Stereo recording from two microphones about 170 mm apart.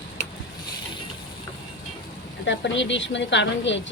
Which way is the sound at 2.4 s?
90° left.